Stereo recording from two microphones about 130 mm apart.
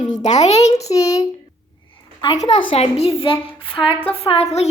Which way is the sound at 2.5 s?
40° left (ahead or behind).